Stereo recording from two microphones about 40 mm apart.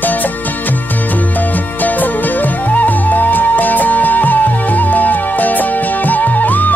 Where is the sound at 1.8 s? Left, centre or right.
Left.